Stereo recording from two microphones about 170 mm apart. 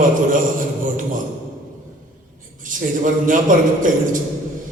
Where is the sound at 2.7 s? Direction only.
50° right (ahead or behind).